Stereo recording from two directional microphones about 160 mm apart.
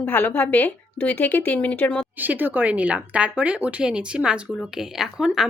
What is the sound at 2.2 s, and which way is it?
A woman's voice, 10° right (ahead or behind).